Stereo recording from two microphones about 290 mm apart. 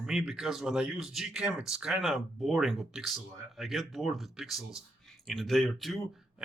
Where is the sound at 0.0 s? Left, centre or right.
Centre.